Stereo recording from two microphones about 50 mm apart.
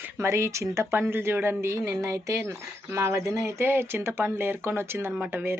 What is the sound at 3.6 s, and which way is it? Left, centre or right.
Speech, right.